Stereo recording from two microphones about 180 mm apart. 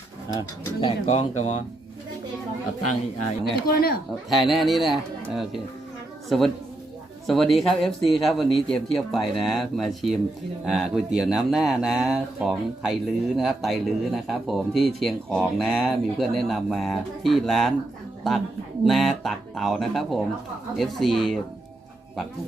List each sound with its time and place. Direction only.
0.3 s speech: 25° left (ahead or behind); by 1.6 s 40° left (ahead or behind)
3.7 s speech: 60° left (ahead or behind)
4.3 s a woman's voice: centre (ahead or behind)